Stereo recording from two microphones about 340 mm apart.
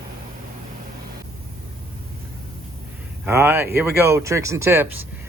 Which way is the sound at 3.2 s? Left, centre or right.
Centre.